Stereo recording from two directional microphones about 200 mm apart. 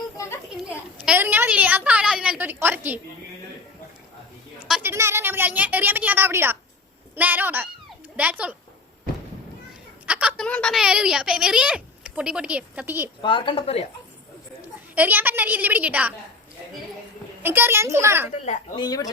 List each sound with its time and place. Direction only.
0.5 s a woman's voice: 5° right (ahead or behind)
4.7 s a woman's voice: 10° right (ahead or behind)
10.1 s a sound: 5° right (ahead or behind)
10.4 s a woman's voice: 5° left (ahead or behind)
13.2 s a woman's voice: 25° left (ahead or behind)
14.9 s a woman's voice: 10° right (ahead or behind)
17.4 s a woman's voice: 10° right (ahead or behind)
18.8 s a woman's voice: 20° left (ahead or behind)